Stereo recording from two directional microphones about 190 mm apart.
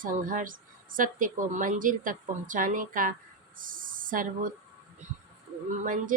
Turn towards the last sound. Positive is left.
turn(degrees=-45)  # may be behind; listen again after turning